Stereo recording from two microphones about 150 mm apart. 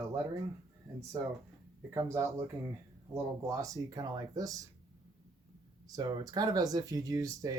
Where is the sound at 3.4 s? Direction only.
20° right (ahead or behind).